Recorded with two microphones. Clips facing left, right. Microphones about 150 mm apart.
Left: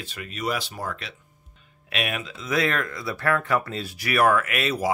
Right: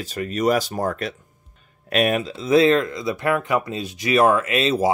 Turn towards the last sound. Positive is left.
turn(degrees=-25)  # may be behind; listen again after turning